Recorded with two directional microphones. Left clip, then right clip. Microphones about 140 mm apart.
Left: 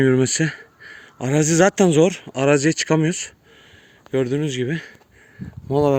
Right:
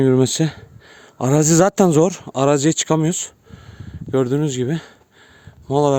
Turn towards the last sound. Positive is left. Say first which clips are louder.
# right 2 dB
turn(degrees=-45)  # may be behind; listen again after turning